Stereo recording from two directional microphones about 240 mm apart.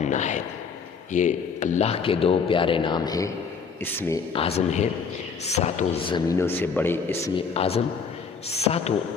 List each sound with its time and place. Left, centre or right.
0.0 s a sound: left
1.1 s a man's voice: left; by 4.2 s centre
4.3 s a man's voice: left
7.5 s a man's voice: left